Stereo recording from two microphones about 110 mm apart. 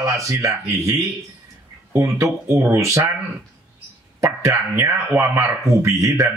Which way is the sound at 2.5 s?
25° right (ahead or behind).